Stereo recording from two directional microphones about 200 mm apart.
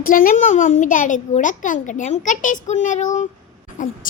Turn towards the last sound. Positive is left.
turn(degrees=40)  # may be behind; listen again after turning